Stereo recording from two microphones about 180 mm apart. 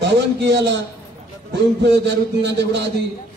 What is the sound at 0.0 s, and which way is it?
Speech, 75° right (ahead or behind).